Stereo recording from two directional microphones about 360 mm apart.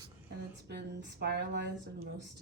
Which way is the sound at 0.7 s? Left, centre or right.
Right.